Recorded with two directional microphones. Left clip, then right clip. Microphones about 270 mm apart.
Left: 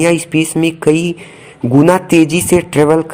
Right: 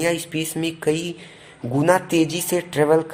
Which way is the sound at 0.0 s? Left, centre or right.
Centre.